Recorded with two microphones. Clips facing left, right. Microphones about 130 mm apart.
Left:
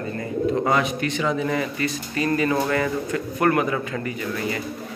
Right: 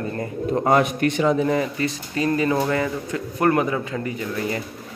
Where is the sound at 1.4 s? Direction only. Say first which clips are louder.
Right 2 dB; 30° right (ahead or behind).